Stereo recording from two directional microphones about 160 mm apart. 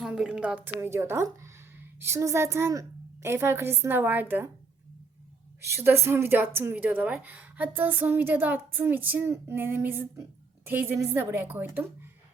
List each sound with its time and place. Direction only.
0.0 s a woman's voice: 5° right (ahead or behind)
5.6 s a woman's voice: 15° right (ahead or behind)